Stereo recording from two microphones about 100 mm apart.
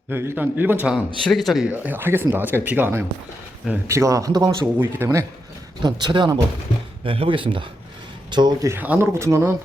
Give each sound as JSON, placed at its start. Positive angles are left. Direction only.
{"t": 0.1, "sound": "speech", "side_deg": -25}
{"t": 1.2, "sound": "speech", "side_deg": 0}
{"t": 1.6, "sound": "speech", "side_deg": -15}
{"t": 3.8, "sound": "speech", "side_deg": -30}
{"t": 4.8, "sound": "speech", "side_deg": -25}
{"t": 5.8, "sound": "speech", "side_deg": -50}
{"t": 7.0, "sound": "speech", "side_deg": -60}
{"t": 8.8, "sound": "speech", "side_deg": -15}
{"t": 9.1, "sound": "speech", "side_deg": -30}